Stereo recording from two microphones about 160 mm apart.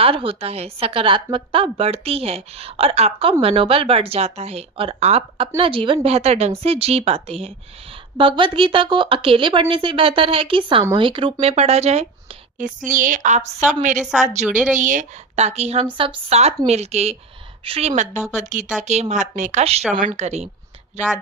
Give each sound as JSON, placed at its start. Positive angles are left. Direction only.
{"t": 0.0, "sound": "a woman's voice", "side_deg": -35}
{"t": 14.0, "sound": "a woman's voice", "side_deg": -5}
{"t": 14.8, "sound": "a woman's voice", "side_deg": -50}